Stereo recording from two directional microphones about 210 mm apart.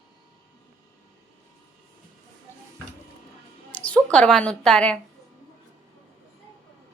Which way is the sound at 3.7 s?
5° left (ahead or behind).